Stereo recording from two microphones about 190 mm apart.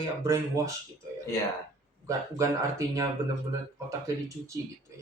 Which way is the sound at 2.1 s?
15° right (ahead or behind).